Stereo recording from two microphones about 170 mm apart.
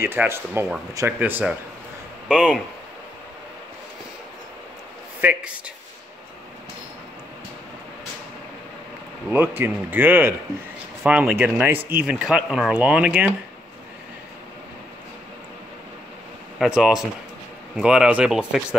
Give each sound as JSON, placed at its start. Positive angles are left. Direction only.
{"t": 0.0, "sound": "speech", "side_deg": -15}
{"t": 5.2, "sound": "speech", "side_deg": -10}
{"t": 9.3, "sound": "speech", "side_deg": -10}
{"t": 16.5, "sound": "speech", "side_deg": -5}